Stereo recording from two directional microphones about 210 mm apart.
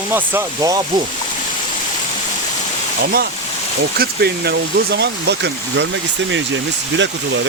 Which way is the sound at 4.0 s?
50° right (ahead or behind).